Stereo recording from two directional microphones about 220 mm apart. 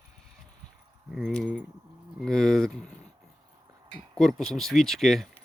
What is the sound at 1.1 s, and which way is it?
Speech, centre (ahead or behind).